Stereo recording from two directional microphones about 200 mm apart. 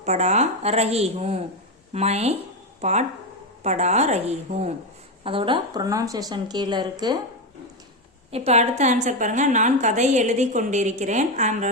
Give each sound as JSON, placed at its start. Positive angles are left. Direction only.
{"t": 0.0, "sound": "a woman's voice", "side_deg": -35}
{"t": 8.3, "sound": "a woman's voice", "side_deg": -30}